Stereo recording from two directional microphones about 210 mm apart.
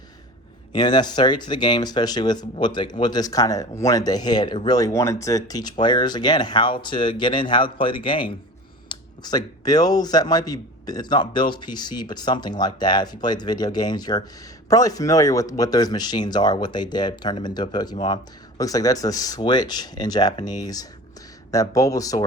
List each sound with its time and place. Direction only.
0.7 s speech: 20° left (ahead or behind)